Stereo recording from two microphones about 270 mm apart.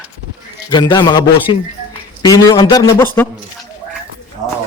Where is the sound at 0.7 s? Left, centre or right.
Centre.